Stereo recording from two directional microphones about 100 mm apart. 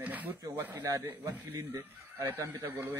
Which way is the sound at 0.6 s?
20° right (ahead or behind).